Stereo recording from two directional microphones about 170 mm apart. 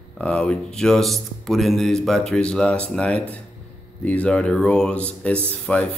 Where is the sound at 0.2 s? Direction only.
5° left (ahead or behind).